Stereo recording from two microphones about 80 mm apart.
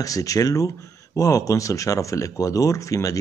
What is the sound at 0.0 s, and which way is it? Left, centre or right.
Speech, left.